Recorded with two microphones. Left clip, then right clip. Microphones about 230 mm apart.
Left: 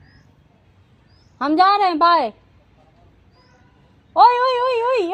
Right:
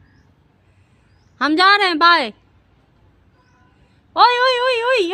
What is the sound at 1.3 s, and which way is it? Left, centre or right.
A woman's voice, right.